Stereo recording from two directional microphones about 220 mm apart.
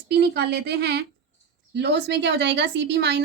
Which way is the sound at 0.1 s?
50° right (ahead or behind).